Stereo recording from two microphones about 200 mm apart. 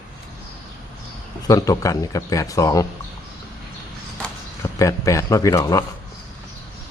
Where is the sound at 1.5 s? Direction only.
15° left (ahead or behind).